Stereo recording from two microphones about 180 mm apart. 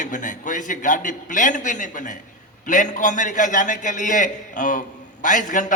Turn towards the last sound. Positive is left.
turn(degrees=45)  # may be behind; listen again after turning